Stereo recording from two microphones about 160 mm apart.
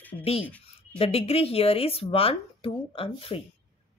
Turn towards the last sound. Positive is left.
turn(degrees=35)  # may be behind; listen again after turning